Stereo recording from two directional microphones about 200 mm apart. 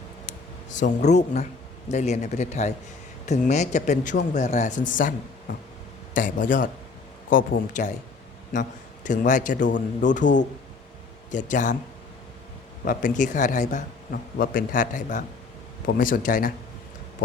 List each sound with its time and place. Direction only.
0.7 s speech: 35° left (ahead or behind)
6.1 s speech: 40° left (ahead or behind)
9.0 s speech: 40° left (ahead or behind)
11.3 s speech: 40° left (ahead or behind)
12.8 s speech: 40° left (ahead or behind)